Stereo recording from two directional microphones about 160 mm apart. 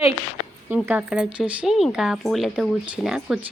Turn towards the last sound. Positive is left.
turn(degrees=-5)  # may be behind; listen again after turning